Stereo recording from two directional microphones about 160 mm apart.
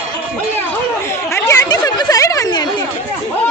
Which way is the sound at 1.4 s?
20° left (ahead or behind).